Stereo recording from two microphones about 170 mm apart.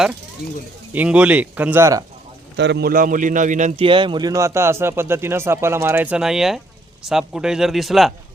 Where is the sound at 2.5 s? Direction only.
90° right; by 3.8 s 45° right (ahead or behind).